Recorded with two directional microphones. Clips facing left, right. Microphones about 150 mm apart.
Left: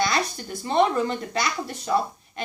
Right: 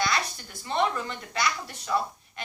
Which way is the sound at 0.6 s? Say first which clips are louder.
Left 6 dB; 30° left (ahead or behind).